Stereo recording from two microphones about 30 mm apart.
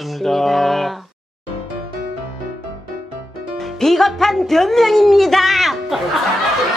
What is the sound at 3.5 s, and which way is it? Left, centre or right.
Speech, centre.